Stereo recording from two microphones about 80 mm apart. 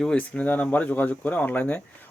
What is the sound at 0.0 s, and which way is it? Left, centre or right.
Speech, centre.